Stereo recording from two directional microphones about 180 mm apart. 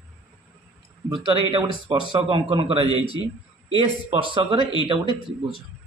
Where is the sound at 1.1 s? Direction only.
30° right (ahead or behind).